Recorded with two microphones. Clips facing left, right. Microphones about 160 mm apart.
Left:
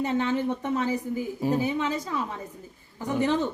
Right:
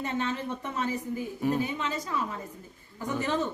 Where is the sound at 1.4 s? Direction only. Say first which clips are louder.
Left 1 dB; 30° left (ahead or behind).